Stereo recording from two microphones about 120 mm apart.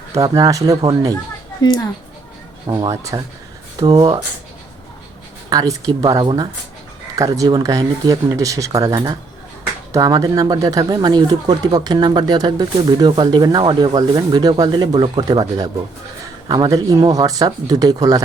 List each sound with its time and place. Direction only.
0.1 s speech: 30° right (ahead or behind)
1.6 s a woman's voice: 35° left (ahead or behind)
2.6 s speech: 35° right (ahead or behind)
3.8 s speech: 45° right (ahead or behind)
5.5 s speech: 30° right (ahead or behind)
16.5 s speech: 30° right (ahead or behind)